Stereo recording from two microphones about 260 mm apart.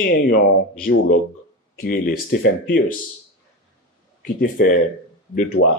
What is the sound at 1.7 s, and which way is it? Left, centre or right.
Speech, left.